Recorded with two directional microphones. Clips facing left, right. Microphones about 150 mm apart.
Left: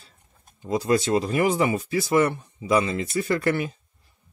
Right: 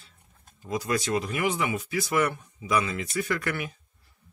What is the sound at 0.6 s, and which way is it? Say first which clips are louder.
Speech: left 6 dB; 30° left (ahead or behind).